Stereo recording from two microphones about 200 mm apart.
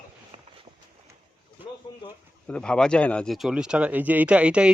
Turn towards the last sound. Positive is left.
turn(degrees=-5)  # may be behind; listen again after turning